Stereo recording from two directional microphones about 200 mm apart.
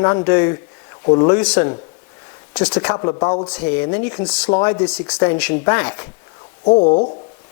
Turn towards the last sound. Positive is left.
turn(degrees=40)  # may be behind; listen again after turning